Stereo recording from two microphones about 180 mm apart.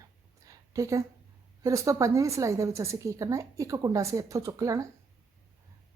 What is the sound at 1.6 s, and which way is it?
A woman's voice, 15° right (ahead or behind).